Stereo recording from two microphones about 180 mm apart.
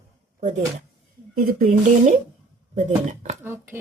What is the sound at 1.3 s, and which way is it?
A woman's voice, 50° right (ahead or behind).